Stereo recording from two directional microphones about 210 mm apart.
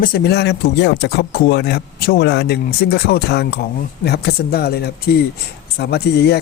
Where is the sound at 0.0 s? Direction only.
50° left (ahead or behind).